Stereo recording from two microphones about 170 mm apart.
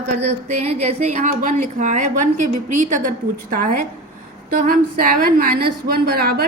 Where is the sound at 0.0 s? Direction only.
40° right (ahead or behind).